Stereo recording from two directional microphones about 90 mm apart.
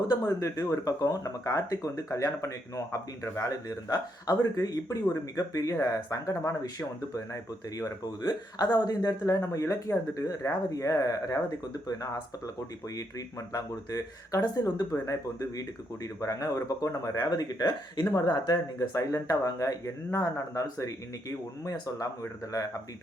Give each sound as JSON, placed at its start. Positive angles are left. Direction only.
{"t": 0.1, "sound": "speech", "side_deg": 40}
{"t": 13.5, "sound": "speech", "side_deg": 45}